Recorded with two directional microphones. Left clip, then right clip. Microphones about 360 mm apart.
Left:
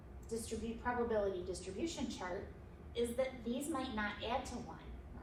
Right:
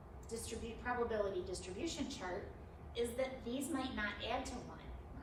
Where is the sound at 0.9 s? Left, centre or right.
Centre.